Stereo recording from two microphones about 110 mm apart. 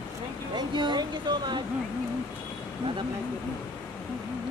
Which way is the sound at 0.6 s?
40° right (ahead or behind).